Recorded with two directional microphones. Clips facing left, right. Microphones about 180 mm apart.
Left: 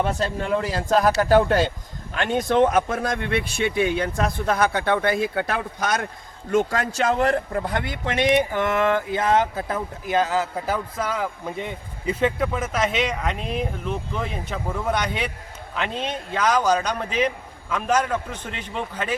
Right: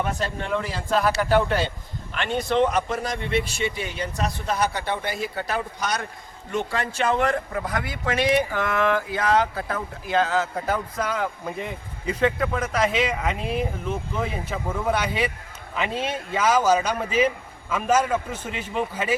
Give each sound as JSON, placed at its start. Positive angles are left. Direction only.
{"t": 0.0, "sound": "speech", "side_deg": 35}